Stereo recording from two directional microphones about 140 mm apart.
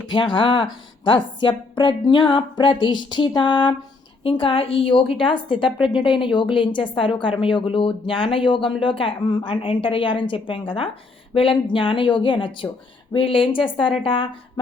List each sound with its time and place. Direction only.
0.1 s speech: 35° left (ahead or behind)